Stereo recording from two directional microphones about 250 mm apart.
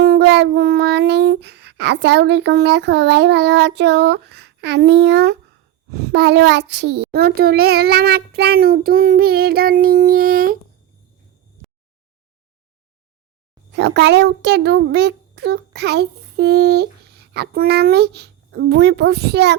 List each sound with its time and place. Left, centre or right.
0.0 s a sound: right
5.9 s a child's voice: right
13.7 s a child's voice: right